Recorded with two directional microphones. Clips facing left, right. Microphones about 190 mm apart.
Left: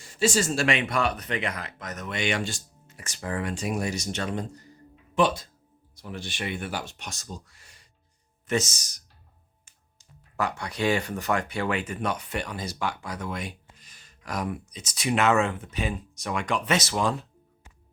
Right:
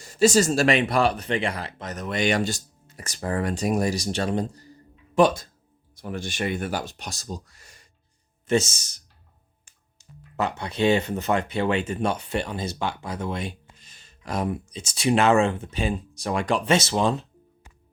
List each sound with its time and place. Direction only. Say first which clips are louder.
0.0 s speech: right 6 dB; 40° right (ahead or behind)
5.1 s speech: right 5 dB; 45° right (ahead or behind)
8.4 s speech: right 5 dB; 30° right (ahead or behind)
10.3 s speech: right 3 dB; 25° right (ahead or behind)